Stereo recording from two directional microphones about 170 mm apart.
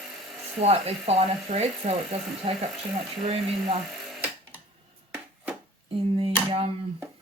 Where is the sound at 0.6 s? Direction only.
40° right (ahead or behind).